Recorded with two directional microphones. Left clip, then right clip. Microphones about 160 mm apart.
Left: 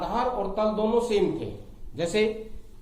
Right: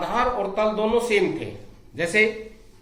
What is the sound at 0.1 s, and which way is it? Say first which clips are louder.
Speech: right 6 dB; 15° left (ahead or behind).